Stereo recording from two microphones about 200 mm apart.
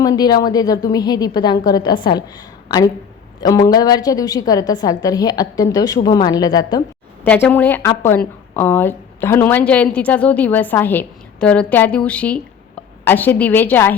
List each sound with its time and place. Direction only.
0.0 s a woman's voice: 20° left (ahead or behind)
7.3 s a woman's voice: 5° left (ahead or behind)